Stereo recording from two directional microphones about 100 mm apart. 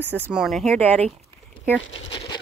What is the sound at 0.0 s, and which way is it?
Speech, 20° right (ahead or behind).